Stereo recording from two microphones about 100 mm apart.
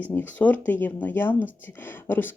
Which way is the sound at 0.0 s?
20° left (ahead or behind).